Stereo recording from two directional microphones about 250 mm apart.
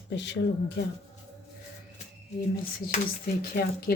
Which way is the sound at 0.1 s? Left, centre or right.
Left.